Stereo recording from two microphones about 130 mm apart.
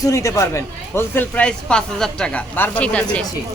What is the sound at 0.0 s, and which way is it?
Speech, 25° left (ahead or behind).